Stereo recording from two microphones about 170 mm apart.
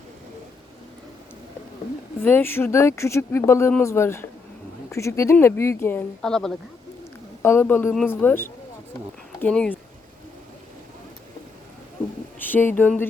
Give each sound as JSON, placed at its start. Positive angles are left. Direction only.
{"t": 2.2, "sound": "speech", "side_deg": 10}
{"t": 12.4, "sound": "speech", "side_deg": 10}